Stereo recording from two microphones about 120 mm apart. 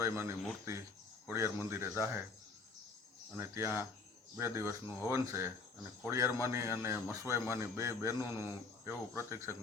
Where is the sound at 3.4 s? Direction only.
20° right (ahead or behind).